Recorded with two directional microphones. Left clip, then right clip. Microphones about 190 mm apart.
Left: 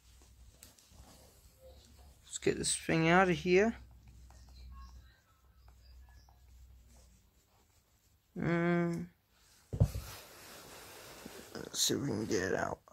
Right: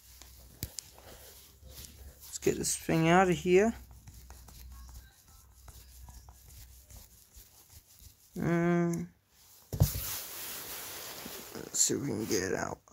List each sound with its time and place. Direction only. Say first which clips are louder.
2.4 s speech: right 2 dB; 15° right (ahead or behind)
8.4 s a sound: right 3 dB; 15° right (ahead or behind)
11.5 s speech: right 2 dB; 5° right (ahead or behind)